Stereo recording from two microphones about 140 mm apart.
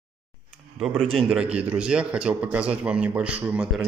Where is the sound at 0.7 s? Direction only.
Centre (ahead or behind).